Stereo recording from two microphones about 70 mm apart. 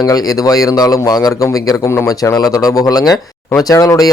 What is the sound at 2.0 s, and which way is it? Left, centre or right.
Speech, left.